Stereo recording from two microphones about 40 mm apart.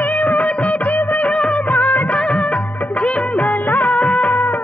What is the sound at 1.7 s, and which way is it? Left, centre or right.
Music of bollywood, left.